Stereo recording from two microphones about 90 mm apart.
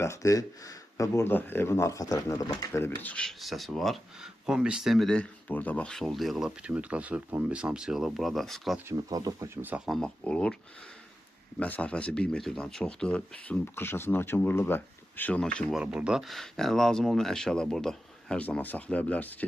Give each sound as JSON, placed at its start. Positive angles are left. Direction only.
{"t": 0.0, "sound": "speech", "side_deg": 35}
{"t": 1.2, "sound": "speech", "side_deg": 25}
{"t": 3.0, "sound": "speech", "side_deg": 15}
{"t": 3.2, "sound": "speech", "side_deg": 0}
{"t": 5.0, "sound": "speech", "side_deg": 10}
{"t": 8.9, "sound": "speech", "side_deg": -40}
{"t": 9.6, "sound": "speech", "side_deg": -20}
{"t": 10.0, "sound": "speech", "side_deg": 10}
{"t": 11.6, "sound": "speech", "side_deg": 15}
{"t": 13.7, "sound": "speech", "side_deg": 25}
{"t": 15.7, "sound": "speech", "side_deg": -10}
{"t": 16.2, "sound": "speech", "side_deg": 0}
{"t": 18.3, "sound": "speech", "side_deg": 15}